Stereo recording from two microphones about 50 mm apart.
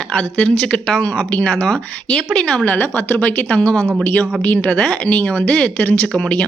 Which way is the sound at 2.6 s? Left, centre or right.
Left.